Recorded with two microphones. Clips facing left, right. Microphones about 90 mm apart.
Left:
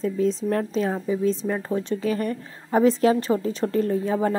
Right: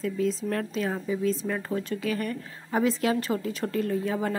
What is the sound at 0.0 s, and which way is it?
A woman's voice, 30° left (ahead or behind).